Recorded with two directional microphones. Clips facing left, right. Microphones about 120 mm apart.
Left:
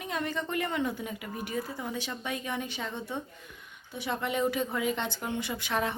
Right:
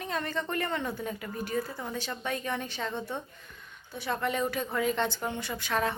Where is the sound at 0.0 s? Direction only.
10° left (ahead or behind).